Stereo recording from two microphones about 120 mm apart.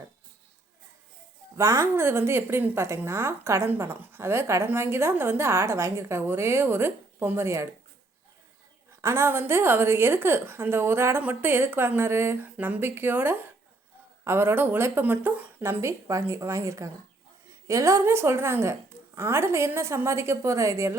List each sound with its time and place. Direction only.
1.5 s a woman's voice: 25° right (ahead or behind)
9.0 s a woman's voice: 20° right (ahead or behind)